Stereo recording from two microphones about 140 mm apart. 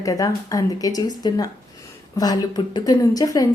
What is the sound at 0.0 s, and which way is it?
A woman's voice, 25° left (ahead or behind).